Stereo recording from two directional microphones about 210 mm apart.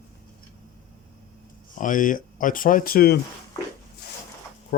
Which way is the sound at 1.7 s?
40° left (ahead or behind).